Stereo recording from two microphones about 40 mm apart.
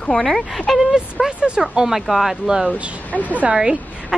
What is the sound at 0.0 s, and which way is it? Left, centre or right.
Speech, left.